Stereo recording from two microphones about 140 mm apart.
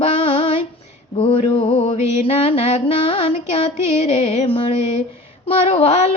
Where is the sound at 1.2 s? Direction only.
45° left (ahead or behind).